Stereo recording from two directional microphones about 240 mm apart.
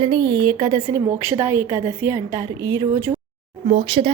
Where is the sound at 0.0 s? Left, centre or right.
Centre.